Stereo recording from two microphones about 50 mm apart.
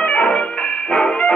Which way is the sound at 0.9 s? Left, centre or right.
Left.